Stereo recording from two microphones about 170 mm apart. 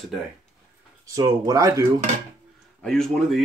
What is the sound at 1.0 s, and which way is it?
Speech, 20° right (ahead or behind).